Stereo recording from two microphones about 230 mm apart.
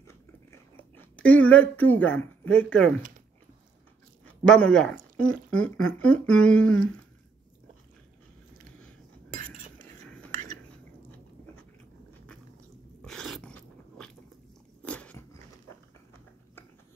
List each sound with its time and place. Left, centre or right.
0.0 s chewing: centre
4.5 s speech: centre
9.3 s cutlery: right
10.0 s whispering: centre
13.0 s dog: centre
14.8 s biting: centre